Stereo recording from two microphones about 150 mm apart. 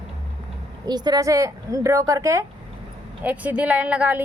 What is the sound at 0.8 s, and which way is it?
Speech, 25° right (ahead or behind).